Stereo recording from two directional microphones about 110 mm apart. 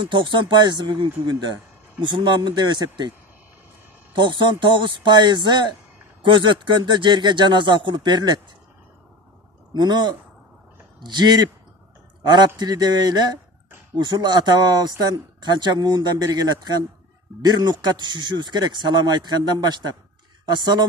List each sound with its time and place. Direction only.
0.0 s speech: 45° right (ahead or behind)
4.1 s speech: 45° right (ahead or behind)
9.8 s speech: 40° right (ahead or behind)